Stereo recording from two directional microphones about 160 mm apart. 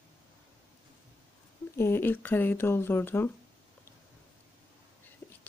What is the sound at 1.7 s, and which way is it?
Speech, 15° left (ahead or behind).